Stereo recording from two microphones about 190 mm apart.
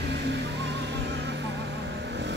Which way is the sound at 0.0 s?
60° right (ahead or behind).